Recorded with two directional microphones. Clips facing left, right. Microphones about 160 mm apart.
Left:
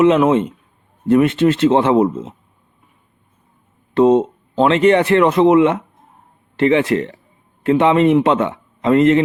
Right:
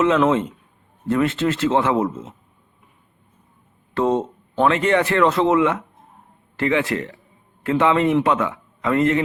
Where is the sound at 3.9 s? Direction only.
20° left (ahead or behind).